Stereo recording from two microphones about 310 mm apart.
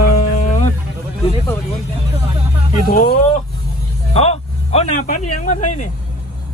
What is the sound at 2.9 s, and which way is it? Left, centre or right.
Speech, left.